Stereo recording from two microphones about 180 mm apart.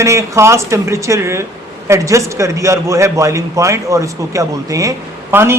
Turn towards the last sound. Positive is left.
turn(degrees=-15)  # may be behind; listen again after turning